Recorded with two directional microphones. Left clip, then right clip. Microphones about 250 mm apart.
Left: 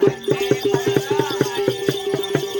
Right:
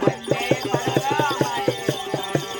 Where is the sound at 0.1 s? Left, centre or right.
Centre.